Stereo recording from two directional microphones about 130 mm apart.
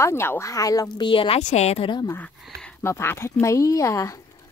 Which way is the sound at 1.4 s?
60° left (ahead or behind).